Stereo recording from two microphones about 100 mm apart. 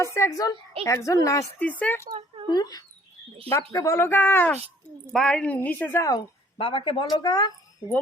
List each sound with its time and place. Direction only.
0.0 s a woman's voice: 30° left (ahead or behind)
1.8 s speech: 20° left (ahead or behind)
2.5 s speech: 40° left (ahead or behind)
3.5 s speech: 30° left (ahead or behind)
5.1 s a woman's voice: 5° left (ahead or behind)
5.6 s speech: 20° left (ahead or behind)
6.6 s speech: 65° left (ahead or behind); by 7.5 s 45° left (ahead or behind)